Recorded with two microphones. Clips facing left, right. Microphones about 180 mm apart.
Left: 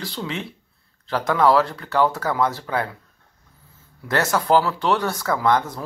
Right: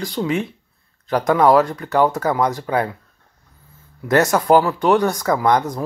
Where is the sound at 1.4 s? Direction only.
45° right (ahead or behind).